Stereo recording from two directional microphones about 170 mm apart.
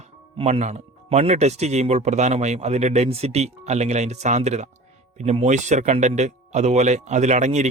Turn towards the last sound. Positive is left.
turn(degrees=-45)  # may be behind; listen again after turning